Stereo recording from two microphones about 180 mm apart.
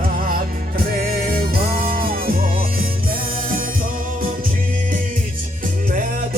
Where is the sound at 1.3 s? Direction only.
55° right (ahead or behind).